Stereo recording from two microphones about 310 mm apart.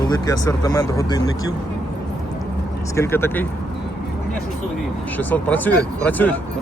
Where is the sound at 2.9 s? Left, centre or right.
Centre.